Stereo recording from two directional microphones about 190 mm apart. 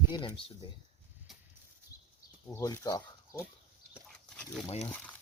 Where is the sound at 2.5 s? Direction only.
15° left (ahead or behind).